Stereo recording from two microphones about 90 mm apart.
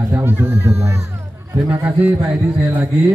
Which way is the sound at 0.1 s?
25° right (ahead or behind).